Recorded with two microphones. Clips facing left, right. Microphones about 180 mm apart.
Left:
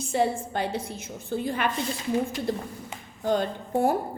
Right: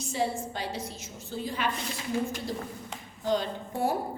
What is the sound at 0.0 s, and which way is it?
A woman's voice, 55° left (ahead or behind).